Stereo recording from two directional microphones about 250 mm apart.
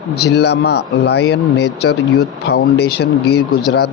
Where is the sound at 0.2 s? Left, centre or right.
Left.